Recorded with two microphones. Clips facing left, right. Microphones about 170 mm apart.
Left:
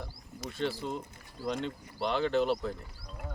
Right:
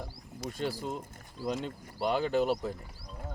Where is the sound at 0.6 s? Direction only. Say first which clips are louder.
Left 1 dB; 10° right (ahead or behind).